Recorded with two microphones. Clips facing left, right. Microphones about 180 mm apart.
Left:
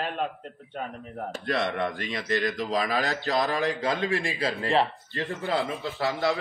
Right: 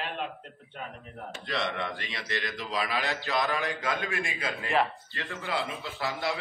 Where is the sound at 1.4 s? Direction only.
55° left (ahead or behind).